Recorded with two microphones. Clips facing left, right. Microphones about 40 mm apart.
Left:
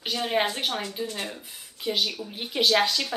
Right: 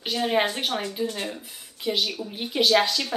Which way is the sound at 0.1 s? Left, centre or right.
Centre.